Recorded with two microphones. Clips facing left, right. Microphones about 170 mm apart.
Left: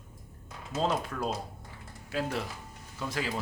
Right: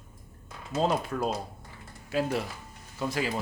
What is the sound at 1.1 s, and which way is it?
Speech, 20° right (ahead or behind).